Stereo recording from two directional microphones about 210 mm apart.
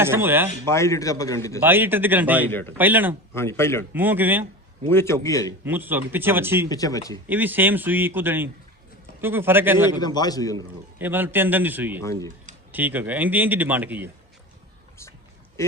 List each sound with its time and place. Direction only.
0.0 s speech: 10° right (ahead or behind)
0.7 s a man's voice: 15° left (ahead or behind)
1.6 s speech: 10° right (ahead or behind)
2.5 s a man's voice: 10° left (ahead or behind)
2.7 s speech: 10° right (ahead or behind)
3.3 s a man's voice: 10° left (ahead or behind)
3.9 s speech: 10° right (ahead or behind)
4.9 s a man's voice: 10° left (ahead or behind)
5.6 s speech: 10° right (ahead or behind)
6.7 s a man's voice: 15° left (ahead or behind)
7.3 s speech: 10° right (ahead or behind)
10.0 s a man's voice: 20° left (ahead or behind)
10.9 s speech: 10° right (ahead or behind)